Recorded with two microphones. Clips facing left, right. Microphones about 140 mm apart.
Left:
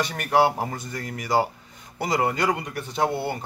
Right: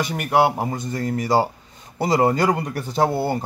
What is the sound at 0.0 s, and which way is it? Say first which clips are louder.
A man's voice: right 2 dB; 15° right (ahead or behind).